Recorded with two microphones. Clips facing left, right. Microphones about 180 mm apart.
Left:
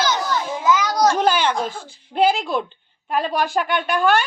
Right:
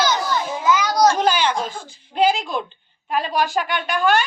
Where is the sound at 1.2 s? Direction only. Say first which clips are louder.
Left 1 dB; 55° left (ahead or behind).